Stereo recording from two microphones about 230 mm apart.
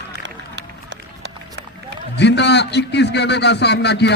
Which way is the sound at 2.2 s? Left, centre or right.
Left.